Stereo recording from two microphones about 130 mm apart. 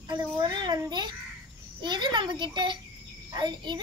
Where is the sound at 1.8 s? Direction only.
35° right (ahead or behind).